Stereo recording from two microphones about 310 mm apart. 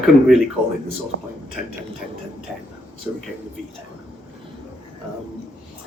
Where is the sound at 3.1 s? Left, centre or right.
Centre.